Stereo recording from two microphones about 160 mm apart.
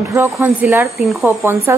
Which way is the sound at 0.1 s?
15° right (ahead or behind).